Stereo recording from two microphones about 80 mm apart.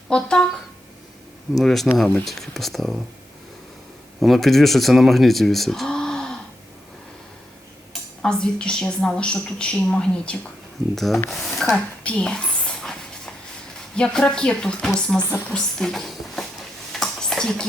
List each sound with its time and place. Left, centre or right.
0.1 s a woman's voice: centre
1.5 s speech: centre
4.2 s speech: centre
8.2 s a woman's voice: centre
11.7 s dog: centre
13.9 s a woman's voice: centre
16.9 s stir: centre